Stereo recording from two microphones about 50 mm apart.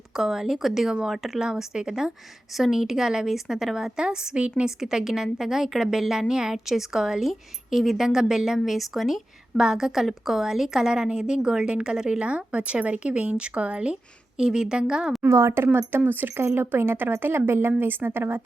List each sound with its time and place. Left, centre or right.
0.2 s a woman's voice: centre
4.0 s speech: centre
4.8 s a woman's voice: centre
15.2 s speech: right
15.9 s a woman's voice: right